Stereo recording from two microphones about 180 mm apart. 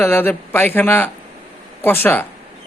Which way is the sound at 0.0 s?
10° left (ahead or behind).